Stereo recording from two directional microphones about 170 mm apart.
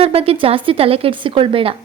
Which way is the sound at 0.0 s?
35° right (ahead or behind).